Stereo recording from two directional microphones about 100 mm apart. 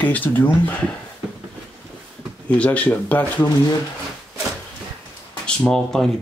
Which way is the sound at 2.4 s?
15° left (ahead or behind).